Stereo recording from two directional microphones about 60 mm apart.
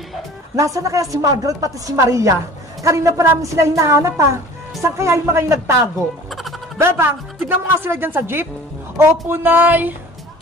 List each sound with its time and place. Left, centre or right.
0.6 s a woman's voice: right
6.8 s a woman's voice: right